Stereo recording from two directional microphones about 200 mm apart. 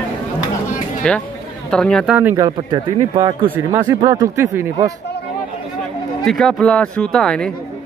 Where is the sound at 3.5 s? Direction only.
15° right (ahead or behind).